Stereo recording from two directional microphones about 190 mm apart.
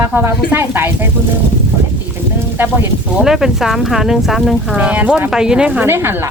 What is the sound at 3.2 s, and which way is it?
Speech, centre (ahead or behind).